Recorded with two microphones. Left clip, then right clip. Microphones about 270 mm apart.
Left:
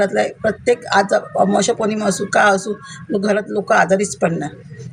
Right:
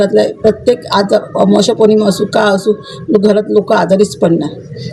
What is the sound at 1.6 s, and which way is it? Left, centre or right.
Speech, left.